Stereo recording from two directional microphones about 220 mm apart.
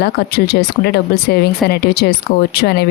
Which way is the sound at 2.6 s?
45° left (ahead or behind).